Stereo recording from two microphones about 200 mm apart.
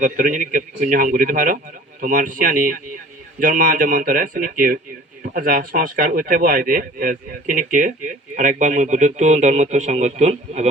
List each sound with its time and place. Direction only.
0.0 s speech: 40° right (ahead or behind)